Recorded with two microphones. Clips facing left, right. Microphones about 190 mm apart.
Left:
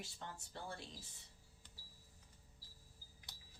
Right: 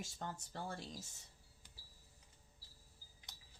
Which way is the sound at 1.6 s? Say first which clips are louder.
Even; 10° right (ahead or behind).